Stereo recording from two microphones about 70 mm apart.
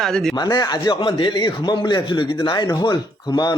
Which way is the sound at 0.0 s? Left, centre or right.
Centre.